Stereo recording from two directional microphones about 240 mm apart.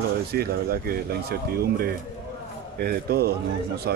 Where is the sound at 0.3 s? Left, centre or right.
Right.